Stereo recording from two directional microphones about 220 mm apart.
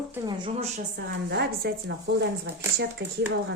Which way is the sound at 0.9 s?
45° right (ahead or behind).